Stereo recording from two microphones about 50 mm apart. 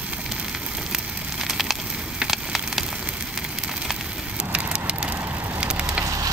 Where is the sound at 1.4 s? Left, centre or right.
Centre.